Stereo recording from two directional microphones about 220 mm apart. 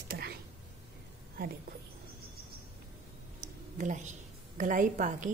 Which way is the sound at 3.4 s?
35° right (ahead or behind).